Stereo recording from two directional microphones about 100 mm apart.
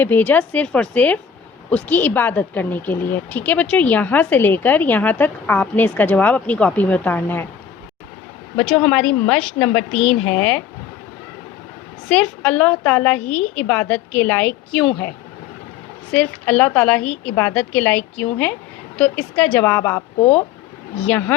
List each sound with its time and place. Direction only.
0.0 s speech: 20° left (ahead or behind)
8.5 s speech: 10° left (ahead or behind)
12.0 s speech: 15° left (ahead or behind)
16.1 s speech: 15° left (ahead or behind)